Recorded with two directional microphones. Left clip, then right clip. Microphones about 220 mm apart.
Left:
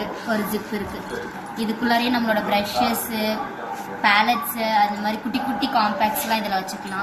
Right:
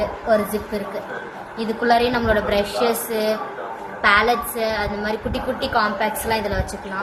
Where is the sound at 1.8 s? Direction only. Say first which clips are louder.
Right 4 dB; 35° right (ahead or behind).